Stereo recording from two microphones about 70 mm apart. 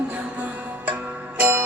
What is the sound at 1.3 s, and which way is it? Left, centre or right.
Music, right.